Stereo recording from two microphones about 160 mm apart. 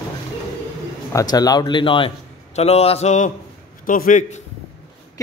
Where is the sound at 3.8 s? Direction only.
60° left (ahead or behind).